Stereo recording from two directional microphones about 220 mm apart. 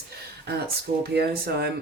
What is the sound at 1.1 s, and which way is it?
Speech, 45° right (ahead or behind).